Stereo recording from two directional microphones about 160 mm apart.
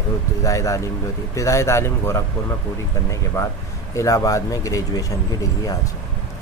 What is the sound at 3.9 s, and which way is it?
Speech, 20° left (ahead or behind).